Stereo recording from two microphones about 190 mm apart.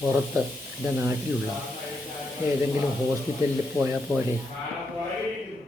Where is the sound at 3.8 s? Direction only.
10° right (ahead or behind).